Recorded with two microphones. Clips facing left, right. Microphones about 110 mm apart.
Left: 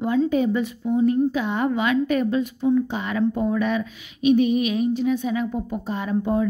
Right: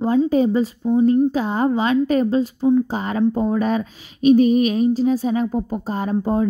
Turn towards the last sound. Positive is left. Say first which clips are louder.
# right 3 dB
turn(degrees=-35)  # may be behind; listen again after turning